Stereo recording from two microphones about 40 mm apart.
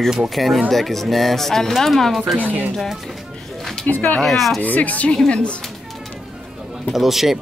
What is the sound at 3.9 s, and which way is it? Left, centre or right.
Speech, left.